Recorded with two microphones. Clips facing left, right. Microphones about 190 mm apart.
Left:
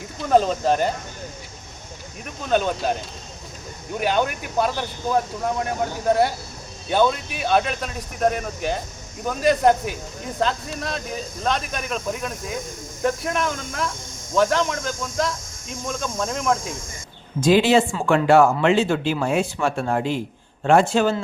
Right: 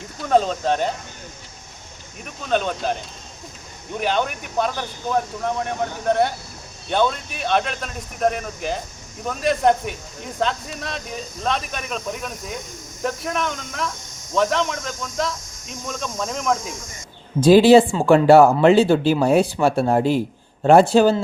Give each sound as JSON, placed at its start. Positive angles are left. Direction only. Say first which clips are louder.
{"t": 0.2, "sound": "speech", "louder": "left 1 dB", "side_deg": 0}
{"t": 2.2, "sound": "speech", "louder": "left 1 dB", "side_deg": 0}
{"t": 17.4, "sound": "speech", "louder": "right 5 dB", "side_deg": -35}